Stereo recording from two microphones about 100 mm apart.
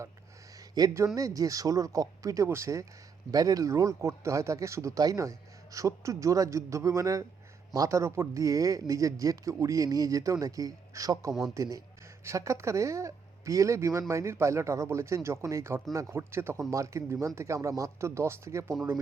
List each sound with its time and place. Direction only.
0.9 s speech: 35° right (ahead or behind)